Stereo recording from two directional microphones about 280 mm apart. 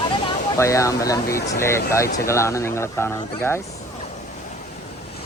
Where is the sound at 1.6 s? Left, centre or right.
Centre.